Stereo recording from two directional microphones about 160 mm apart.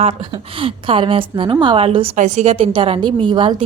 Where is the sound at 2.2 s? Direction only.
50° right (ahead or behind); by 3.6 s 30° right (ahead or behind).